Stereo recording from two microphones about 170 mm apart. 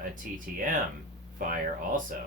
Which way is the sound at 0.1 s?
50° right (ahead or behind).